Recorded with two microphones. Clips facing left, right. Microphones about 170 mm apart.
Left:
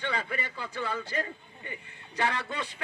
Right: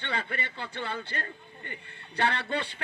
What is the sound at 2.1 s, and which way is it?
Speech, 70° right (ahead or behind).